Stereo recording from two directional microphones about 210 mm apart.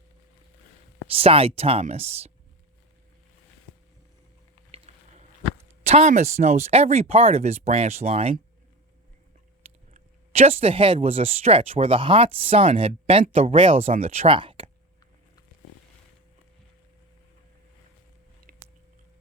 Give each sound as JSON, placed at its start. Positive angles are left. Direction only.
{"t": 1.1, "sound": "speech", "side_deg": -25}
{"t": 4.7, "sound": "a sound", "side_deg": -30}
{"t": 5.8, "sound": "speech", "side_deg": -30}
{"t": 9.9, "sound": "speech", "side_deg": -30}